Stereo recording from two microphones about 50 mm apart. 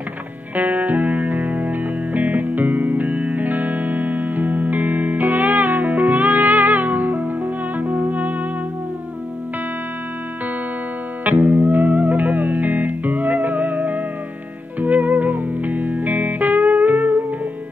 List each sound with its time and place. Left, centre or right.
0.6 s music: right
11.2 s music: right